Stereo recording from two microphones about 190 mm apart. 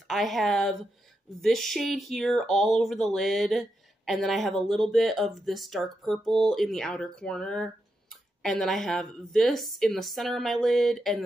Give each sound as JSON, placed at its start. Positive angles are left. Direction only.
{"t": 0.1, "sound": "speech", "side_deg": 0}